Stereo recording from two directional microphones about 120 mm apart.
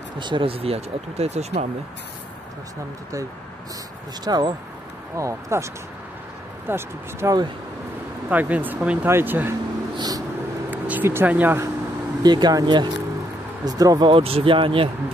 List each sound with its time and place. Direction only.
0.2 s speech: 45° right (ahead or behind); by 1.7 s 70° right (ahead or behind)
4.2 s speech: 35° right (ahead or behind)
5.1 s speech: 25° right (ahead or behind)
6.7 s speech: 20° right (ahead or behind)
9.9 s vehicle: 35° right (ahead or behind)
10.7 s speech: 15° right (ahead or behind)
12.2 s speech: 35° right (ahead or behind)
14.1 s speech: 50° right (ahead or behind)